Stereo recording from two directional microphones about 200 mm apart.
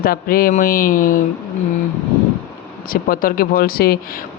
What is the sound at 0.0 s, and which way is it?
Speech, 45° left (ahead or behind).